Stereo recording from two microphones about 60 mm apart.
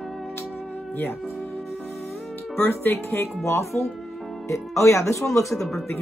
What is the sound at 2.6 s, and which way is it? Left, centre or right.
Speech, left.